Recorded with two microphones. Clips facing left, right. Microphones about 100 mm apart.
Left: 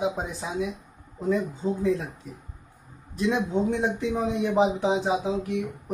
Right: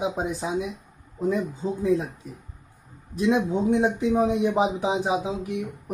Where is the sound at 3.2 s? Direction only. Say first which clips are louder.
Right 2 dB; 20° right (ahead or behind).